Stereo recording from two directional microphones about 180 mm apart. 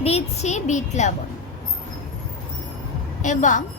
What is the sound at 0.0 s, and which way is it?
A child's voice, 35° left (ahead or behind).